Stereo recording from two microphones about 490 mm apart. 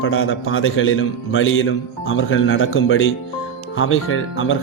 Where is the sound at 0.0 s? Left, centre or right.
Left.